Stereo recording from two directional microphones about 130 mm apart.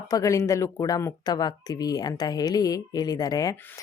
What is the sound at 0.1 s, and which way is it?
Speech, 25° left (ahead or behind).